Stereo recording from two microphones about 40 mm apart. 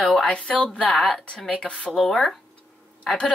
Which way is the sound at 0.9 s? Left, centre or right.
Centre.